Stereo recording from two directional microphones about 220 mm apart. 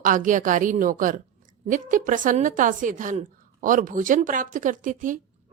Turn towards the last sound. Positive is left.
turn(degrees=-35)  # may be behind; listen again after turning